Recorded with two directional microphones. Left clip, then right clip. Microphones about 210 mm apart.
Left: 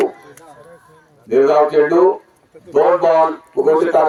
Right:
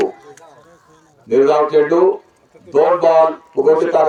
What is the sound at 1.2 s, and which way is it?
Speech, 45° right (ahead or behind).